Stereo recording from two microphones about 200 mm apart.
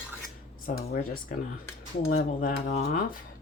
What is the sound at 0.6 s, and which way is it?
Speech, 45° left (ahead or behind).